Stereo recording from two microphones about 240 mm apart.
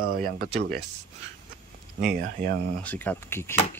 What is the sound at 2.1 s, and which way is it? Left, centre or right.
Speech, right.